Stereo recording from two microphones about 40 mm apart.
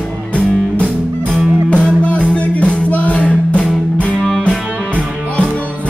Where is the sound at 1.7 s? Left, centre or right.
Left.